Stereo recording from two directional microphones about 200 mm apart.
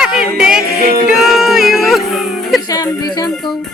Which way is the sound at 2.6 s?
20° left (ahead or behind).